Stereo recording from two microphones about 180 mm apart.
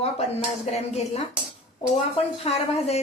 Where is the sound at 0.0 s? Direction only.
35° left (ahead or behind).